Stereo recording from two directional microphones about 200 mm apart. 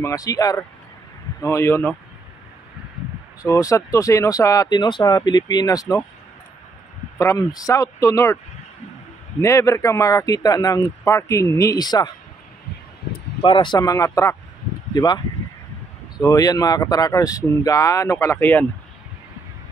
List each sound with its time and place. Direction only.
0.0 s speech: 15° left (ahead or behind)
3.4 s speech: 15° left (ahead or behind)
7.2 s speech: 15° left (ahead or behind)
9.4 s speech: 15° left (ahead or behind)
13.4 s speech: 25° left (ahead or behind)
16.2 s speech: 15° left (ahead or behind)